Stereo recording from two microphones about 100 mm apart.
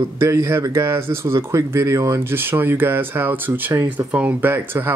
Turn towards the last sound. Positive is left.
turn(degrees=-20)  # may be behind; listen again after turning